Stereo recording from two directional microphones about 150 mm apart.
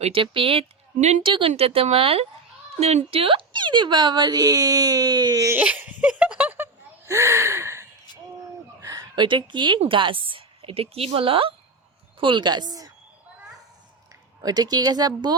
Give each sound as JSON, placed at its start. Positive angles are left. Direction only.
{"t": 0.0, "sound": "speech", "side_deg": -35}
{"t": 0.9, "sound": "speech", "side_deg": -50}
{"t": 1.2, "sound": "speech", "side_deg": -35}
{"t": 5.5, "sound": "a sound", "side_deg": -10}
{"t": 8.8, "sound": "speech", "side_deg": -25}
{"t": 14.4, "sound": "speech", "side_deg": -25}